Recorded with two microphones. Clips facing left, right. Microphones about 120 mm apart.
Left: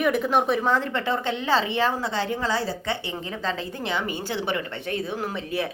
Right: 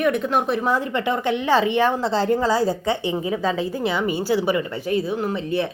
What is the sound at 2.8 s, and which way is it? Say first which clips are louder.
A woman's voice: right 7 dB; 15° right (ahead or behind).